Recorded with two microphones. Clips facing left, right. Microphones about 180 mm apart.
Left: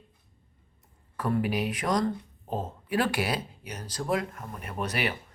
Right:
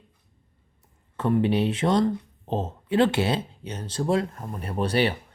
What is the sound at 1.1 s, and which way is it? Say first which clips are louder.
Speech: right 5 dB; 25° right (ahead or behind).